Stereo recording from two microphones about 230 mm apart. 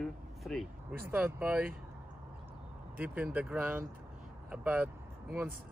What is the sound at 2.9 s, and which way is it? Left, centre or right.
Speech, centre.